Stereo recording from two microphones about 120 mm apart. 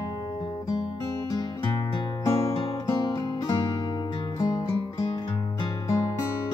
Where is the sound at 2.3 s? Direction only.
55° left (ahead or behind).